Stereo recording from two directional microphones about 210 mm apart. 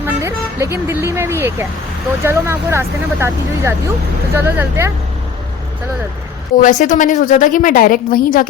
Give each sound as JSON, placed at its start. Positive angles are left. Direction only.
{"t": 0.0, "sound": "speech", "side_deg": -15}
{"t": 6.6, "sound": "a woman's voice", "side_deg": 40}